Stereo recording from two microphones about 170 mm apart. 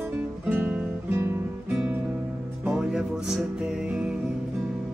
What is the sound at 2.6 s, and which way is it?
Music, 5° right (ahead or behind).